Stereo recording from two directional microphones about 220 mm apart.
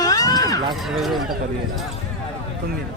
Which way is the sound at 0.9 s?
Centre (ahead or behind).